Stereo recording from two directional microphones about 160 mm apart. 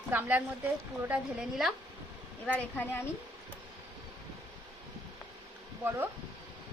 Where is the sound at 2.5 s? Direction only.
10° left (ahead or behind).